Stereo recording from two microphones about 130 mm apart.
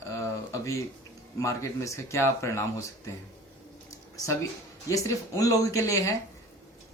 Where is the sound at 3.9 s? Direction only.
25° left (ahead or behind).